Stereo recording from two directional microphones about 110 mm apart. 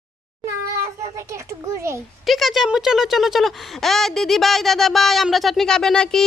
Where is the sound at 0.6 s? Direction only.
30° right (ahead or behind).